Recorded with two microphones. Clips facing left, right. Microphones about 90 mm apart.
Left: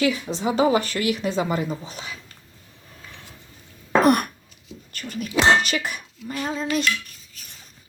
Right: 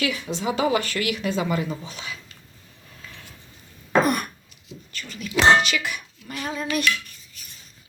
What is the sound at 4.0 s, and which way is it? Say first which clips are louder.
Throat clearing: left 3 dB; 65° left (ahead or behind).